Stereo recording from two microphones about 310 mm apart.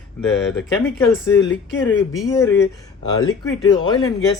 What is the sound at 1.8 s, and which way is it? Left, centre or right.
Speech, centre.